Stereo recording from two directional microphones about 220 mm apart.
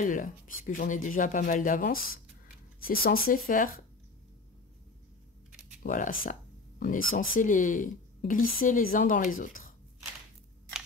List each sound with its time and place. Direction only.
0.0 s speech: 35° left (ahead or behind)
5.8 s speech: 40° left (ahead or behind)